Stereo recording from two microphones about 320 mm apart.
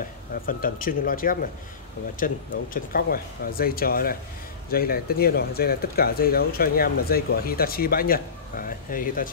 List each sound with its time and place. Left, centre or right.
0.5 s speech: left